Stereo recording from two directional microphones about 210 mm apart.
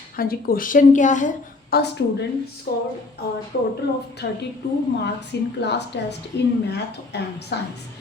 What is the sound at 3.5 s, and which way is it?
Speech, 50° left (ahead or behind).